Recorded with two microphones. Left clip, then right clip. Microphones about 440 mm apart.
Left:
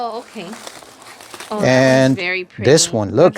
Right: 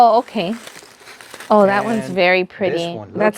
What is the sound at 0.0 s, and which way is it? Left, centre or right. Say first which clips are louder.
Speech: right 13 dB; right.